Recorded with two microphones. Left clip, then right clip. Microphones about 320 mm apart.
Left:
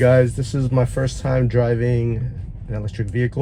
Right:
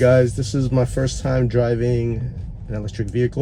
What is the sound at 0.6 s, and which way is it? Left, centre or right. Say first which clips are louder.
Speech: even; left.